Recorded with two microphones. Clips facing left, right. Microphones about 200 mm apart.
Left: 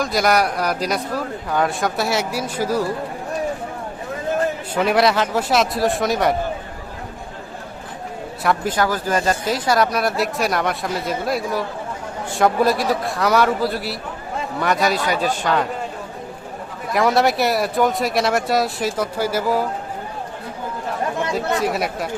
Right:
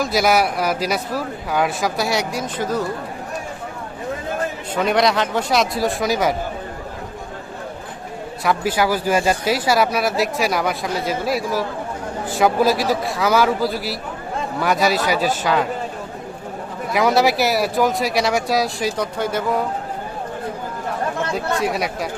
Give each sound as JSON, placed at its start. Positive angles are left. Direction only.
{"t": 0.0, "sound": "speech", "side_deg": -5}
{"t": 4.7, "sound": "speech", "side_deg": 5}
{"t": 8.4, "sound": "speech", "side_deg": -10}
{"t": 16.9, "sound": "speech", "side_deg": 0}
{"t": 21.6, "sound": "speech", "side_deg": 0}